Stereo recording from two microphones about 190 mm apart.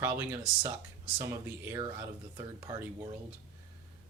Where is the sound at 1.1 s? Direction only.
20° right (ahead or behind).